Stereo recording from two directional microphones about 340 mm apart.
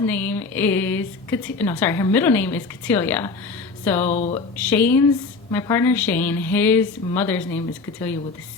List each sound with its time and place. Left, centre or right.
0.0 s a woman's voice: centre
4.1 s speech: centre
4.5 s a woman's voice: centre